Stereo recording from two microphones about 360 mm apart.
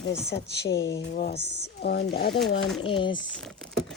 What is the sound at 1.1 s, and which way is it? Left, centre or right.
Speech, left.